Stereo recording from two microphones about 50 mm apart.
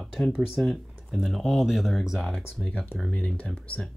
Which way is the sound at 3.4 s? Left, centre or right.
Left.